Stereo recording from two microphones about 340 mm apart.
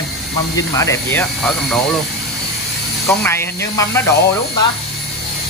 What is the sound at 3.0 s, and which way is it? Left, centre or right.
Speech, centre.